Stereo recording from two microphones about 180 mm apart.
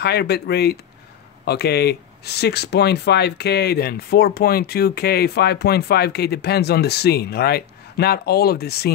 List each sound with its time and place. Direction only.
0.0 s speech: 65° left (ahead or behind)